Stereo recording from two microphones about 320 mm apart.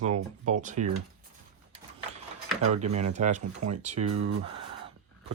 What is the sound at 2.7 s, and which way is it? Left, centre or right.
Speech, right.